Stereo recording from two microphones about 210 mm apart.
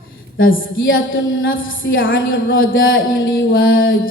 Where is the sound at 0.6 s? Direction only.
70° left (ahead or behind).